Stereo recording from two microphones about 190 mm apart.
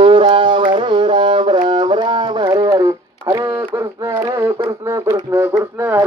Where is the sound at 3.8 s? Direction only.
20° right (ahead or behind).